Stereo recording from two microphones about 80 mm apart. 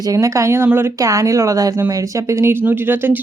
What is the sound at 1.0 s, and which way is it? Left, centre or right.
A woman's voice, right.